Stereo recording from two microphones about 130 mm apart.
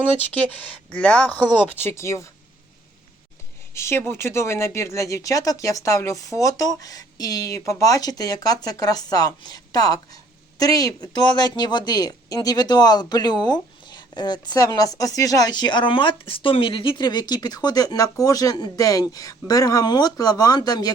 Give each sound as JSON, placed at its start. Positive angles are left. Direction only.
{"t": 0.5, "sound": "speech", "side_deg": 10}
{"t": 3.8, "sound": "speech", "side_deg": 20}